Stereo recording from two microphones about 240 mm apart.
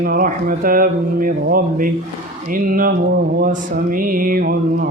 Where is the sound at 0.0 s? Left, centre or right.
Right.